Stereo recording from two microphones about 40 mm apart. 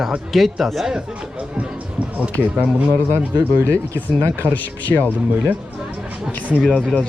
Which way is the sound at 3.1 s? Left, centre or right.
Right.